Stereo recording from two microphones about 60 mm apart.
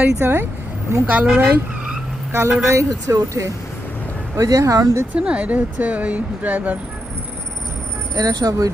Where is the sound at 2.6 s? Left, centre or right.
Right.